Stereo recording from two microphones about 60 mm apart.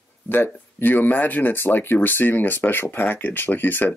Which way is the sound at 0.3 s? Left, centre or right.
Left.